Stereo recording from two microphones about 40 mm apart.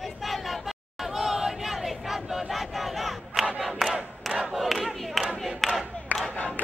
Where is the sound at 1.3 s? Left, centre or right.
Centre.